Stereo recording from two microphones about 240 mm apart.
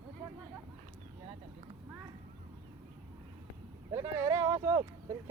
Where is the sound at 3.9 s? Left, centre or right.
Centre.